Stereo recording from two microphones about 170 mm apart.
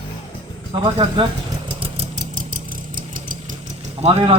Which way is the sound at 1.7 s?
35° right (ahead or behind).